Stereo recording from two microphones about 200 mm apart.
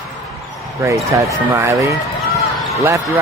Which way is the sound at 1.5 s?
15° right (ahead or behind).